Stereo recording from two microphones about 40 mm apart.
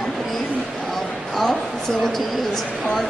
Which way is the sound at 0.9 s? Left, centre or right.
Centre.